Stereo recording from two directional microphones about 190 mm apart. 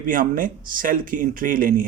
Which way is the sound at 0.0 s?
45° right (ahead or behind).